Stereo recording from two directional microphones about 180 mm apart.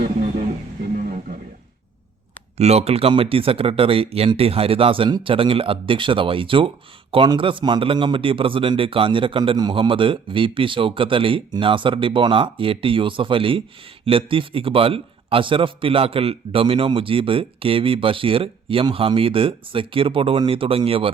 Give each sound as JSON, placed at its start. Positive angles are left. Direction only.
{"t": 2.6, "sound": "a man's voice", "side_deg": -35}